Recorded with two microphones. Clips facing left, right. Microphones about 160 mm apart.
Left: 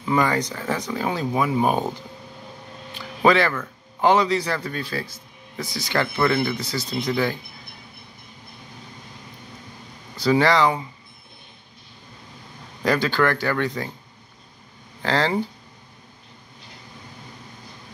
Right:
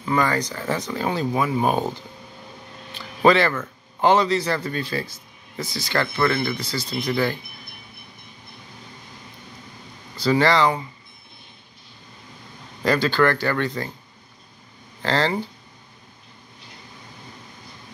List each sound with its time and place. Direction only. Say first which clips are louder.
0.0 s speech: left 1 dB; 10° left (ahead or behind)
0.5 s speech: right 1 dB; centre (ahead or behind)
0.7 s speech: right 1 dB; 10° left (ahead or behind)
3.2 s a sound: right 1 dB; 5° left (ahead or behind)
4.1 s speech: right 1 dB; 10° left (ahead or behind)
4.6 s speech: right 2 dB; 5° right (ahead or behind)
5.7 s speech: even; 15° left (ahead or behind)
5.9 s speech: left 1 dB; 5° left (ahead or behind)
6.5 s speech: left 1 dB; 20° left (ahead or behind)
7.1 s speech: right 1 dB; centre (ahead or behind)
10.3 s speech: even; 10° left (ahead or behind)
12.8 s speech: right 1 dB; centre (ahead or behind)
15.0 s speech: even; centre (ahead or behind)